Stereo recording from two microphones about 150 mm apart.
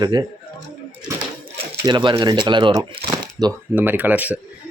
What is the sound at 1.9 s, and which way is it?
Speech, 30° right (ahead or behind).